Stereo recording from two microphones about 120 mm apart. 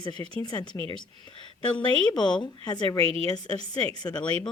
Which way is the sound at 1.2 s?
40° left (ahead or behind).